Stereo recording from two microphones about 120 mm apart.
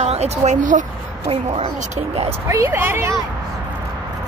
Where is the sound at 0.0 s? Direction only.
65° right (ahead or behind); by 0.8 s 90° right.